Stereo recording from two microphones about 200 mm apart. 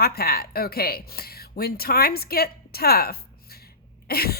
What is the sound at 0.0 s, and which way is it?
A woman's voice, 50° left (ahead or behind).